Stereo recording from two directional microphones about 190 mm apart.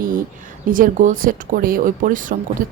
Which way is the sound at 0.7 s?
45° right (ahead or behind).